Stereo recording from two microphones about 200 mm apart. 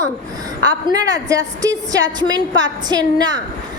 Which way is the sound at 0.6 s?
20° right (ahead or behind).